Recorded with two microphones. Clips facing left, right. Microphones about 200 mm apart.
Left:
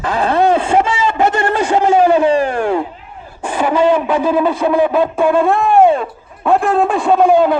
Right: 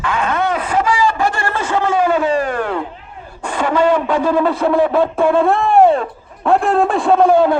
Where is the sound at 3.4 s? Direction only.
5° left (ahead or behind).